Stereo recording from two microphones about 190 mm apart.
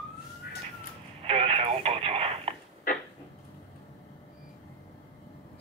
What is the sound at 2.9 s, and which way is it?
Cupboard open or close, 45° left (ahead or behind).